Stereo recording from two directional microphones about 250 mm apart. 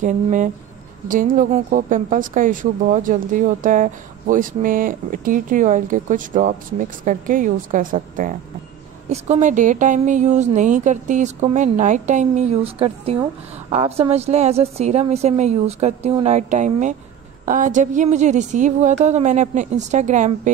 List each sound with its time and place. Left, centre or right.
0.0 s a woman's voice: right